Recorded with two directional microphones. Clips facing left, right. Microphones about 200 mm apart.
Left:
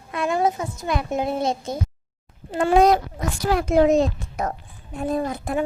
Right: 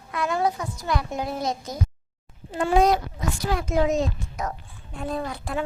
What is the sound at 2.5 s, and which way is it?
A child's voice, 65° left (ahead or behind).